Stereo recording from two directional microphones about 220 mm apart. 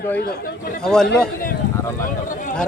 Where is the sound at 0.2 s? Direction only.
45° left (ahead or behind).